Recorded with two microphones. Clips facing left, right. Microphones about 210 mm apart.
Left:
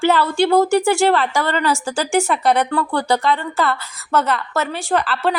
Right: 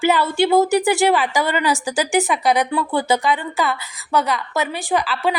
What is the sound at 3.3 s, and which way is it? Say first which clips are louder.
Speech: left 1 dB; centre (ahead or behind).